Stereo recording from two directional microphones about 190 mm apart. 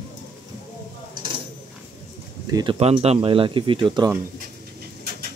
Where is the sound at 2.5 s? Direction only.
20° right (ahead or behind).